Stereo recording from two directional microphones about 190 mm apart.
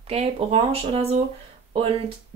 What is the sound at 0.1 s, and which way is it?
Speech, 35° right (ahead or behind).